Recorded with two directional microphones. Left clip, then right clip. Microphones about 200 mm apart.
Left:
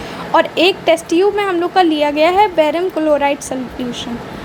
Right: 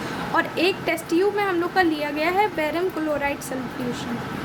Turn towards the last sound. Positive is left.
turn(degrees=25)  # may be behind; listen again after turning